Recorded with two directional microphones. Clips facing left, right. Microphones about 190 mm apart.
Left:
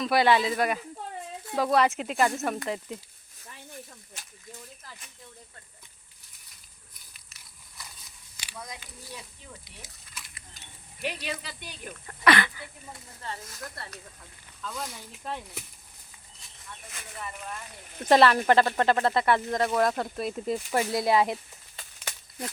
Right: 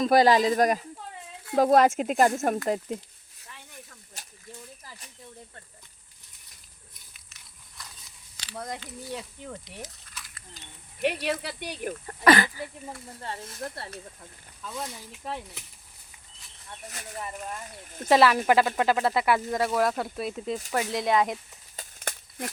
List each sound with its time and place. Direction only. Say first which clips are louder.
0.0 s speech: right 3 dB; 40° right (ahead or behind)
7.1 s crushing: even; centre (ahead or behind)
8.5 s speech: right 7 dB; 50° right (ahead or behind)
11.0 s speech: right 7 dB; 65° right (ahead or behind)
12.0 s speech: right 3 dB; 40° right (ahead or behind)
13.2 s speech: right 3 dB; 30° right (ahead or behind)
14.7 s speech: right 2 dB; centre (ahead or behind)
16.8 s speech: right 5 dB; 40° right (ahead or behind)
18.1 s speech: even; 5° right (ahead or behind)
21.8 s a sound: right 5 dB; 50° right (ahead or behind)